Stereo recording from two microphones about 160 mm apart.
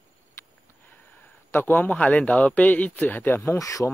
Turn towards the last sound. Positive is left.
turn(degrees=20)  # may be behind; listen again after turning